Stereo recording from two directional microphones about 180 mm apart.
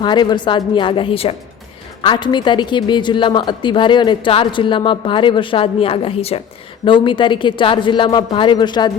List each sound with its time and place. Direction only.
0.0 s a woman's voice: 25° left (ahead or behind)